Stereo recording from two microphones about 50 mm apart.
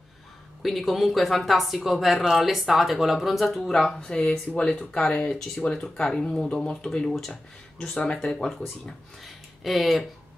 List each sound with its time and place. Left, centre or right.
0.6 s speech: centre
4.0 s speech: centre